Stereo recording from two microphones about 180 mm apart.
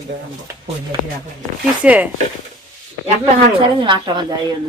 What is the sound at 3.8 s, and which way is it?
Speech, 25° right (ahead or behind).